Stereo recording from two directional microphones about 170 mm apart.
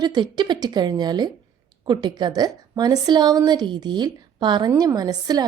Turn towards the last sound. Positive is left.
turn(degrees=-20)  # may be behind; listen again after turning